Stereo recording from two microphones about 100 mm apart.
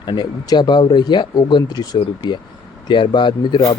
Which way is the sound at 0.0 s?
45° left (ahead or behind).